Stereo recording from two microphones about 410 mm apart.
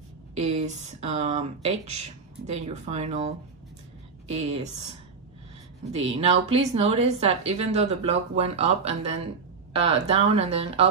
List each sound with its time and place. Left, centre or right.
0.3 s a woman's voice: centre
5.9 s a woman's voice: centre